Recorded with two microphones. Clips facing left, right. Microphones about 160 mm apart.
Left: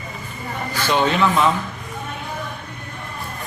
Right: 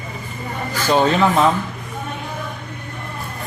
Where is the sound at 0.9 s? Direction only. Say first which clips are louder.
Right 3 dB; 40° right (ahead or behind).